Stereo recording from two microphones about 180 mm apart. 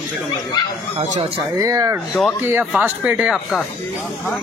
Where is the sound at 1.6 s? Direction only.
15° right (ahead or behind); by 3.6 s centre (ahead or behind).